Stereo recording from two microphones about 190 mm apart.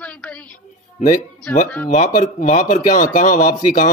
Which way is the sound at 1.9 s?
45° left (ahead or behind).